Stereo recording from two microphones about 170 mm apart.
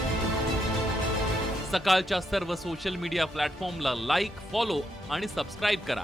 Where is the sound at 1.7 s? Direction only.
Centre (ahead or behind).